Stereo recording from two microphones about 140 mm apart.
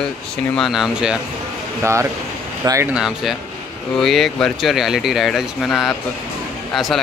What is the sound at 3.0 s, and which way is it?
Speech, 5° right (ahead or behind).